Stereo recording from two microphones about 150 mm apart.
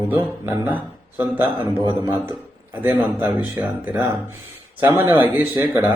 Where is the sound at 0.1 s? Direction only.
15° right (ahead or behind).